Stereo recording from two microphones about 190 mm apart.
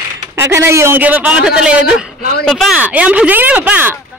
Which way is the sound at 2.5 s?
Centre (ahead or behind).